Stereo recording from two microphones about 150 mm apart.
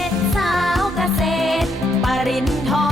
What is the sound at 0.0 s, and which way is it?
Music, centre (ahead or behind).